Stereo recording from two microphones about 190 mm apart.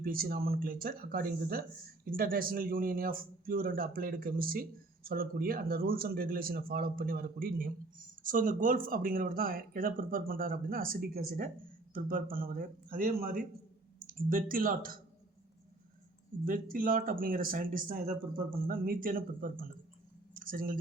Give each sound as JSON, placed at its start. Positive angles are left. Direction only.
{"t": 0.0, "sound": "speech", "side_deg": -50}
{"t": 16.5, "sound": "speech", "side_deg": -45}
{"t": 20.3, "sound": "a sound", "side_deg": -45}